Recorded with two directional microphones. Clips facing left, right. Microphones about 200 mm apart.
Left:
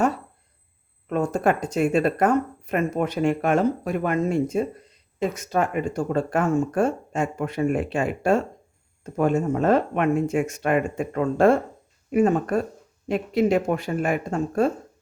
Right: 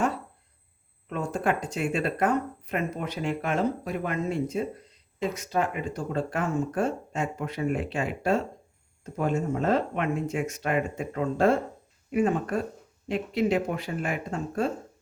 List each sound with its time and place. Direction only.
1.1 s speech: 45° left (ahead or behind)
12.1 s speech: 45° left (ahead or behind)